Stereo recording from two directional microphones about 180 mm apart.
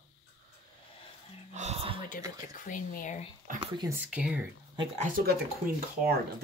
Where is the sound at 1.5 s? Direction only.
35° right (ahead or behind).